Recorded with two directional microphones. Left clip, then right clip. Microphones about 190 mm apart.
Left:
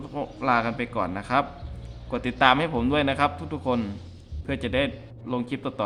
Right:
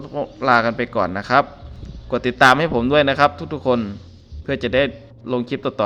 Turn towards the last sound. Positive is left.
turn(degrees=-30)  # may be behind; listen again after turning